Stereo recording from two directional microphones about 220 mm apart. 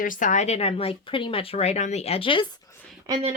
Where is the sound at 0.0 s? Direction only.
35° left (ahead or behind).